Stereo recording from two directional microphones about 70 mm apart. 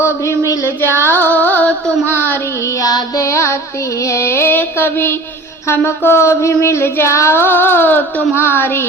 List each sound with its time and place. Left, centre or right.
0.8 s child singing: left
2.8 s music: left
4.3 s child singing: left
8.4 s child singing: left